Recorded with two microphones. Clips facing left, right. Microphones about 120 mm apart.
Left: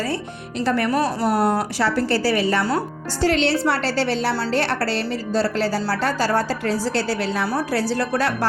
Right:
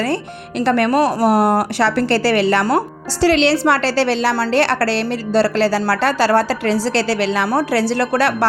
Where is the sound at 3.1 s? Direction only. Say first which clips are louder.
Right 5 dB; 90° right.